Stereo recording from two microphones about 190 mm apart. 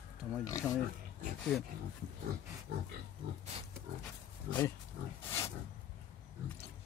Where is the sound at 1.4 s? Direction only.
Centre (ahead or behind).